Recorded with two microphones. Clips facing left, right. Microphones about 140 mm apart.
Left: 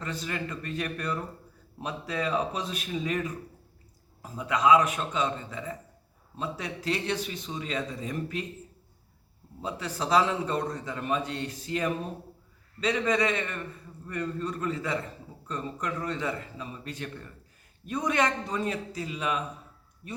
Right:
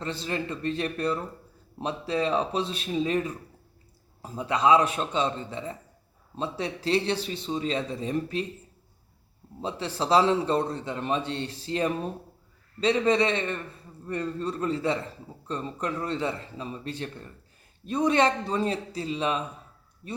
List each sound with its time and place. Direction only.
0.0 s a man's voice: 30° right (ahead or behind)
9.6 s a man's voice: 30° right (ahead or behind)